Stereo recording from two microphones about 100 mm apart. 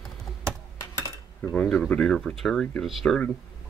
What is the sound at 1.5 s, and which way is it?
Speech, 10° left (ahead or behind).